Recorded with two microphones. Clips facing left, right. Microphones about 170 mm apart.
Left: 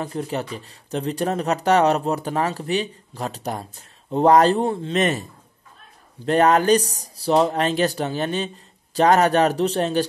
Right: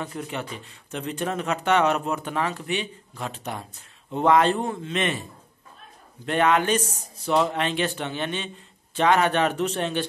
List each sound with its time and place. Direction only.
0.0 s speech: 35° left (ahead or behind)
6.2 s speech: 40° left (ahead or behind)